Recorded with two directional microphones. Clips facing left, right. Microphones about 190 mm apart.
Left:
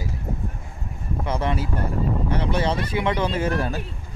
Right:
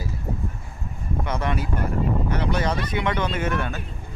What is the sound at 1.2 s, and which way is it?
Speech, 30° left (ahead or behind).